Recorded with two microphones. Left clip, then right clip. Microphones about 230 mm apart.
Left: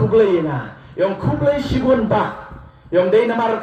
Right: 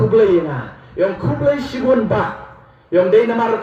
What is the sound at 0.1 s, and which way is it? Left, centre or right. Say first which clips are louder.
A man's voice: even; right.